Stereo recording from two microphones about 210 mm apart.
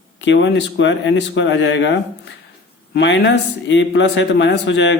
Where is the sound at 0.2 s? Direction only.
60° left (ahead or behind).